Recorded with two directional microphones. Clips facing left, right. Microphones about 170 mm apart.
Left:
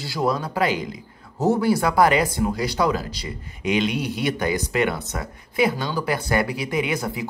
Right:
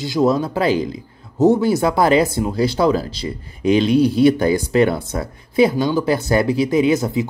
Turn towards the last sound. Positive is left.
turn(degrees=-25)  # may be behind; listen again after turning